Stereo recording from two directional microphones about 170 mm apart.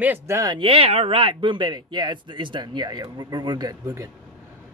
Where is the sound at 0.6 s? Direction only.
35° right (ahead or behind).